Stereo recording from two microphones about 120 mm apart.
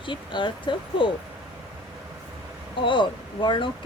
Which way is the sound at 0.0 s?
40° left (ahead or behind).